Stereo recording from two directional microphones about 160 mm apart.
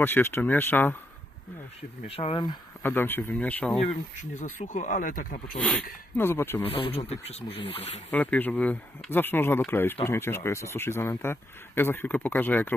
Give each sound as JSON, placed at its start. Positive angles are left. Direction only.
{"t": 0.0, "sound": "speech", "side_deg": 15}
{"t": 2.0, "sound": "speech", "side_deg": 35}
{"t": 2.8, "sound": "speech", "side_deg": 15}
{"t": 3.7, "sound": "speech", "side_deg": 50}
{"t": 5.6, "sound": "speech", "side_deg": 10}
{"t": 6.8, "sound": "speech", "side_deg": 40}
{"t": 8.1, "sound": "speech", "side_deg": 10}